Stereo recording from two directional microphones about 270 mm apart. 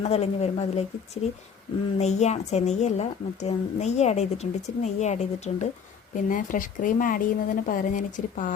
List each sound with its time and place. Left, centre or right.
0.0 s a woman's voice: left